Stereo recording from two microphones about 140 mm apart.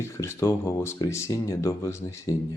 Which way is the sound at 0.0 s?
20° left (ahead or behind).